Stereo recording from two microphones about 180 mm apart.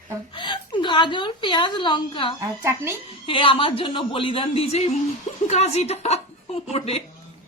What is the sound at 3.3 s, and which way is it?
A woman's voice, 30° left (ahead or behind).